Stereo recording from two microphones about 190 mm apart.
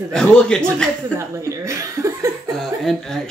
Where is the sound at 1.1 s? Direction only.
15° right (ahead or behind).